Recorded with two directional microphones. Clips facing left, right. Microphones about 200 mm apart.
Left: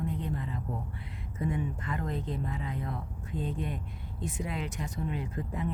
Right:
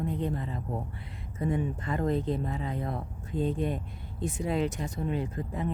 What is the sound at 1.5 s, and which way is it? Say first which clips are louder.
Speech: right 4 dB; 35° right (ahead or behind).